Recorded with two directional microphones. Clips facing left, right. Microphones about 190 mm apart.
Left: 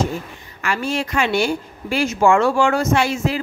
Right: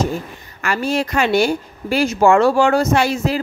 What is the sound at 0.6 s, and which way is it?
A woman's voice, 40° right (ahead or behind).